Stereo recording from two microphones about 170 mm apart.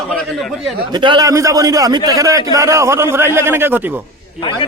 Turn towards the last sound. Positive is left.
turn(degrees=-15)  # may be behind; listen again after turning